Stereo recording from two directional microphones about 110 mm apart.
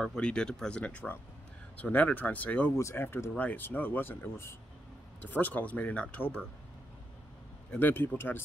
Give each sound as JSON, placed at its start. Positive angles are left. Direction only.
{"t": 0.0, "sound": "speech", "side_deg": 5}
{"t": 2.7, "sound": "speech", "side_deg": 25}
{"t": 7.7, "sound": "speech", "side_deg": 15}